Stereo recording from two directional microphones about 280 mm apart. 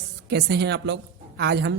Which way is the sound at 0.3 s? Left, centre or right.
Right.